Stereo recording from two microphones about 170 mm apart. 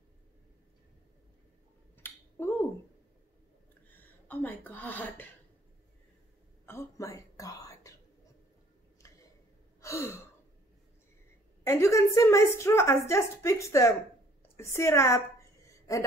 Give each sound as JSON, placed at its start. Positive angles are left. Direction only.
{"t": 2.0, "sound": "finger snapping", "side_deg": 10}
{"t": 3.9, "sound": "a sound", "side_deg": 10}
{"t": 6.6, "sound": "whispering", "side_deg": 15}
{"t": 9.0, "sound": "a sound", "side_deg": 20}
{"t": 9.8, "sound": "gasp", "side_deg": 15}
{"t": 11.6, "sound": "a woman's voice", "side_deg": 15}